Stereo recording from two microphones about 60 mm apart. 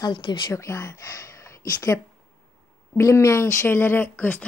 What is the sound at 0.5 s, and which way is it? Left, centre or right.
Speech, left.